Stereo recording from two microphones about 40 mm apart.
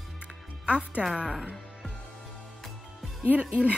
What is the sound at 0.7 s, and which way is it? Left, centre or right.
Speech, right.